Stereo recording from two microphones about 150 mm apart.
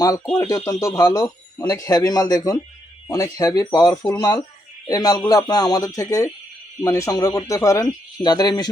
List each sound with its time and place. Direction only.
0.0 s speech: 25° left (ahead or behind)